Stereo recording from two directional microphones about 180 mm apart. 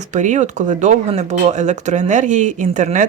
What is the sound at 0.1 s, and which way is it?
Speech, 40° right (ahead or behind).